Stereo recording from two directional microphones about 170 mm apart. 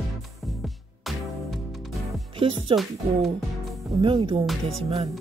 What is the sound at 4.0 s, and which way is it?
Speech, 30° right (ahead or behind).